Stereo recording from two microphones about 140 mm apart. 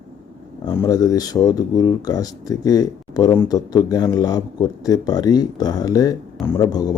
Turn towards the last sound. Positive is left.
turn(degrees=25)  # may be behind; listen again after turning